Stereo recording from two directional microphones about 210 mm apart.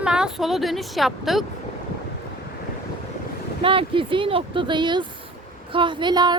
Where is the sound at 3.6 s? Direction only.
25° right (ahead or behind).